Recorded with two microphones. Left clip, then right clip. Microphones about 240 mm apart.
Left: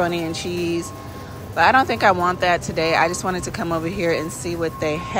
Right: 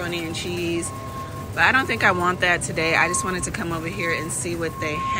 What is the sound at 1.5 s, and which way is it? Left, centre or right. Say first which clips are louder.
Speech: left 3 dB; centre.